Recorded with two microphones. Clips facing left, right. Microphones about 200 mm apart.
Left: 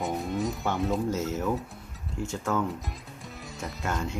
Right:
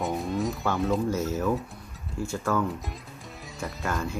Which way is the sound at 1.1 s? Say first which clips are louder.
Right 2 dB; 20° left (ahead or behind).